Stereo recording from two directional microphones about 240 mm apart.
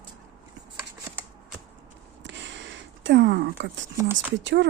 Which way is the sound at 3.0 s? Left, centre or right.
Right.